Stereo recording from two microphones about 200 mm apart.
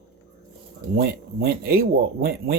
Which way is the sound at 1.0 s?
50° right (ahead or behind).